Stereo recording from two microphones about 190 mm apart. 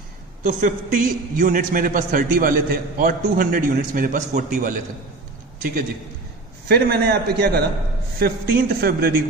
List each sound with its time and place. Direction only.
0.4 s a man's voice: 45° right (ahead or behind)
6.7 s a man's voice: 55° right (ahead or behind)